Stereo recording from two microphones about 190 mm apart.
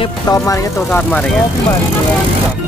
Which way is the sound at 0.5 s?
15° left (ahead or behind).